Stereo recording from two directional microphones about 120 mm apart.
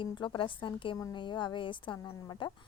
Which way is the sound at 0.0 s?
40° left (ahead or behind).